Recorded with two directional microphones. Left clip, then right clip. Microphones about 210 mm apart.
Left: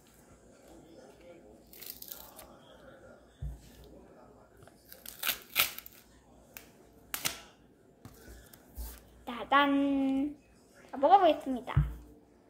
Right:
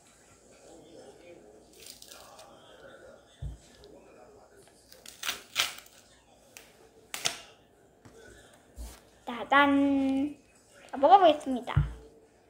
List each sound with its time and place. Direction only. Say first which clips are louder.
5.0 s scissors: even; 25° left (ahead or behind)
9.2 s speech: right 3 dB; centre (ahead or behind)